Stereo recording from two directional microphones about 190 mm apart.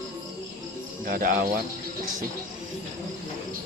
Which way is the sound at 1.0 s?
50° right (ahead or behind).